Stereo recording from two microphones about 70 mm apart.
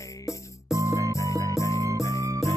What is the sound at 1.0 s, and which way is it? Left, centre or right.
Music, left.